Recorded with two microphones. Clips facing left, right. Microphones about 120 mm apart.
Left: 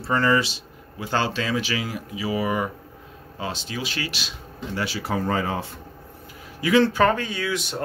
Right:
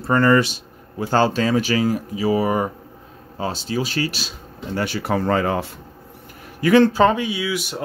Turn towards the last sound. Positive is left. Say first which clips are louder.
# right 3 dB
turn(degrees=-10)  # may be behind; listen again after turning